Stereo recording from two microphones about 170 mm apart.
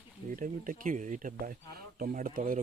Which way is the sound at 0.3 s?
50° right (ahead or behind).